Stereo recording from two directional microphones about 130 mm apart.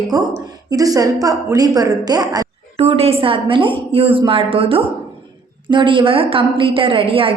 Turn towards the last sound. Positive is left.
turn(degrees=-45)  # may be behind; listen again after turning